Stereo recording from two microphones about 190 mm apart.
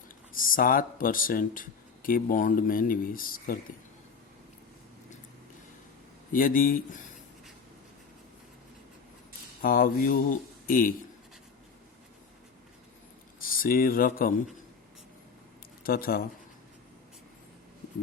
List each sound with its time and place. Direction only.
0.3 s speech: 45° left (ahead or behind)
6.3 s speech: 45° left (ahead or behind)
9.6 s speech: 50° left (ahead or behind)
13.4 s speech: 50° left (ahead or behind)
15.8 s speech: 50° left (ahead or behind)